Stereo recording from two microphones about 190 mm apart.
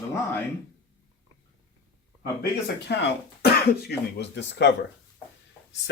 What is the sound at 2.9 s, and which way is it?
Speech, 60° left (ahead or behind).